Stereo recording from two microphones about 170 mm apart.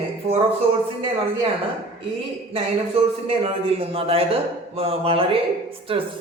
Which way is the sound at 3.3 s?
35° right (ahead or behind).